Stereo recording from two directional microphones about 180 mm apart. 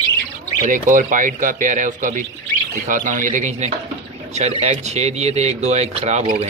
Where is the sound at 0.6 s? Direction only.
45° right (ahead or behind).